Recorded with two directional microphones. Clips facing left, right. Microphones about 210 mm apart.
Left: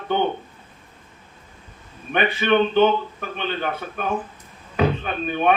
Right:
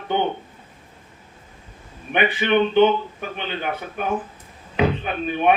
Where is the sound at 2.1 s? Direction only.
15° right (ahead or behind).